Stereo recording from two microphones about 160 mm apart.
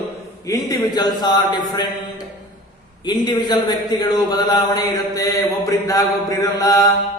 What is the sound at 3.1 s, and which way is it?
Speech, 25° left (ahead or behind).